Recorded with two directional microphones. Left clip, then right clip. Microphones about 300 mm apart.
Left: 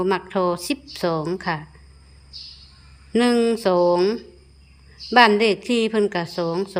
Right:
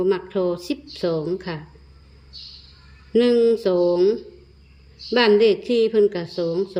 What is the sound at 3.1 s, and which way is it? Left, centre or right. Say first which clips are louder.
A woman's voice: right 3 dB; centre.